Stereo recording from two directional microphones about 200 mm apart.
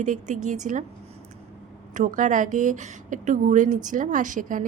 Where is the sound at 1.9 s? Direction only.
40° right (ahead or behind).